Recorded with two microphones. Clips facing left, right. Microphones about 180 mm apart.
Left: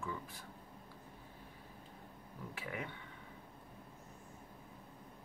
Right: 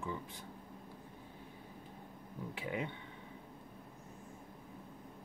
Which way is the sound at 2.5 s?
20° right (ahead or behind).